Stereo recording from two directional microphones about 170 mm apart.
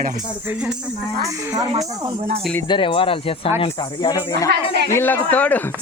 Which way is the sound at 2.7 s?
30° left (ahead or behind).